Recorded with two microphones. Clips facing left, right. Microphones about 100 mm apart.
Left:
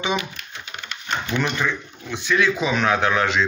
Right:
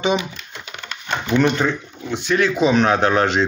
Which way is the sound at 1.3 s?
35° right (ahead or behind).